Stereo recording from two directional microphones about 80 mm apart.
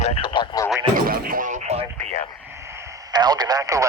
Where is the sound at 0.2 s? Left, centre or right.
Left.